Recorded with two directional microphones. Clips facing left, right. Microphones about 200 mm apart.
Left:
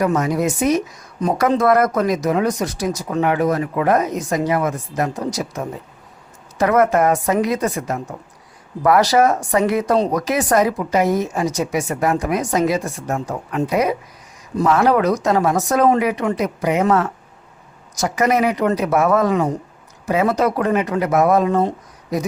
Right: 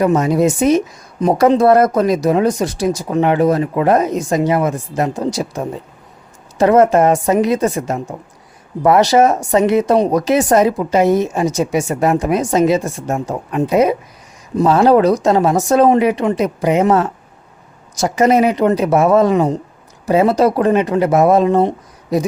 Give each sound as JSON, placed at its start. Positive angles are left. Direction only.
{"t": 0.0, "sound": "speech", "side_deg": -30}